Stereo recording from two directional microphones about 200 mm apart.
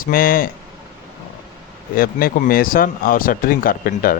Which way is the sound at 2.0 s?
45° left (ahead or behind).